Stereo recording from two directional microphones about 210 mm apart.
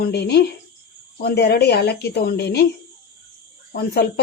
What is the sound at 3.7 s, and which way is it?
Speech, 45° left (ahead or behind).